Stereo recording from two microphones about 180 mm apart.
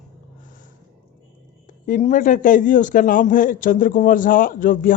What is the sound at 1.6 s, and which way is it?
A man's voice, 45° left (ahead or behind).